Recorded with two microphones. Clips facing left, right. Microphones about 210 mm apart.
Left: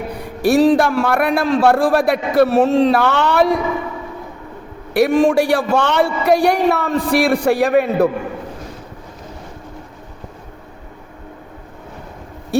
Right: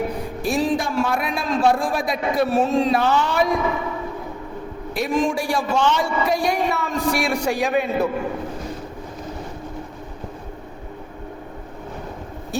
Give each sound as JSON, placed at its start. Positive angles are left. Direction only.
{"t": 0.4, "sound": "a man's voice", "side_deg": 70}
{"t": 4.9, "sound": "a man's voice", "side_deg": 70}